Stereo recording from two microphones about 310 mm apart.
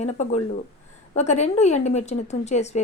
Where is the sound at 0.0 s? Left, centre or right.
Left.